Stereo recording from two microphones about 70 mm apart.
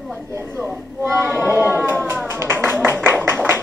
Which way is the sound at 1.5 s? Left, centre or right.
Right.